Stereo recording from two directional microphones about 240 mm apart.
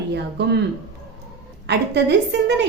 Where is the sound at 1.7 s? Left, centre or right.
Right.